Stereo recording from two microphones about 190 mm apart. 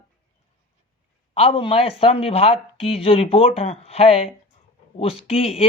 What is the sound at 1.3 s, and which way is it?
Speech, 30° left (ahead or behind).